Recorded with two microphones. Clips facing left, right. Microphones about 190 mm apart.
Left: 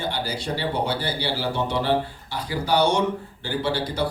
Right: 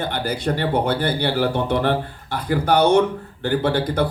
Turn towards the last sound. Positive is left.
turn(degrees=-55)  # may be behind; listen again after turning